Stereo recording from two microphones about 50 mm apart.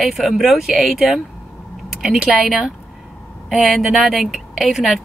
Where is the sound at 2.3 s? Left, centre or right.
Centre.